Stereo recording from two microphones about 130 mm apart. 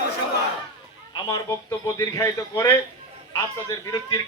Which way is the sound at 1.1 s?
30° left (ahead or behind).